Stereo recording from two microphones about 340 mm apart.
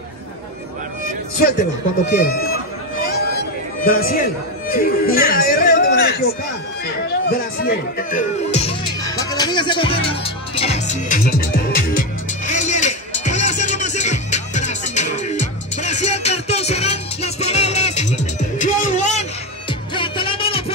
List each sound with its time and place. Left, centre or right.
2.0 s speech: left
3.8 s speech: left
7.2 s speech: left
12.4 s music: left